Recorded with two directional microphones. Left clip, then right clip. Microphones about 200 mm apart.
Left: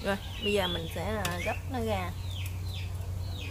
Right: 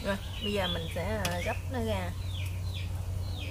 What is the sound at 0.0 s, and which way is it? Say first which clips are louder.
Speech: left 2 dB; 30° left (ahead or behind).